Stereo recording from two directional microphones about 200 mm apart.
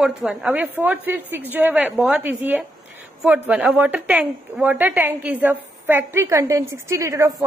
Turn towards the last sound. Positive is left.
turn(degrees=-15)  # may be behind; listen again after turning